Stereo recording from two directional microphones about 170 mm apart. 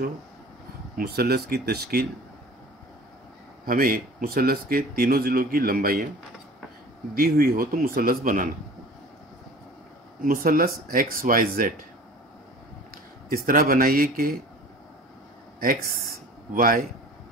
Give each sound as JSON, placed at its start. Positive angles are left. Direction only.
{"t": 0.9, "sound": "speech", "side_deg": -70}
{"t": 3.6, "sound": "speech", "side_deg": -55}
{"t": 7.2, "sound": "speech", "side_deg": -60}
{"t": 10.2, "sound": "speech", "side_deg": -55}
{"t": 13.3, "sound": "speech", "side_deg": -55}
{"t": 16.5, "sound": "speech", "side_deg": -55}